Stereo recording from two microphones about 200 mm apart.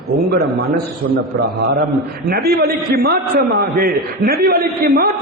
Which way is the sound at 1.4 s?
55° right (ahead or behind).